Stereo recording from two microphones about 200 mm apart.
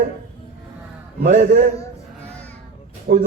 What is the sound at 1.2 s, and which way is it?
Speech, 40° right (ahead or behind).